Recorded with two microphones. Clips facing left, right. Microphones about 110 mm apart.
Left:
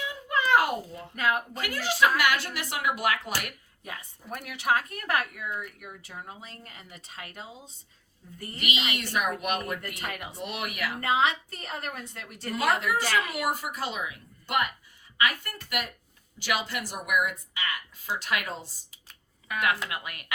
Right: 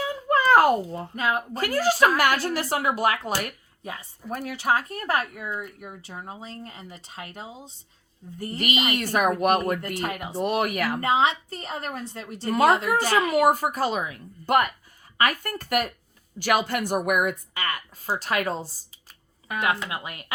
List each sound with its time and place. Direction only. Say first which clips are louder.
0.0 s a sound: right 7 dB; 40° right (ahead or behind)
1.1 s speech: right 1 dB; 25° right (ahead or behind)
1.6 s a woman's voice: right 5 dB; 40° right (ahead or behind)
9.8 s a woman's voice: right 7 dB; 35° right (ahead or behind)